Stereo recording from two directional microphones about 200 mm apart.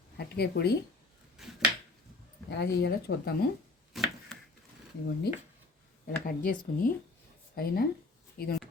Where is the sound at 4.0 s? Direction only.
Centre (ahead or behind).